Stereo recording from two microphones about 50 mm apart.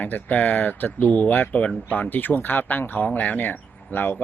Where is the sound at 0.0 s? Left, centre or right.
Left.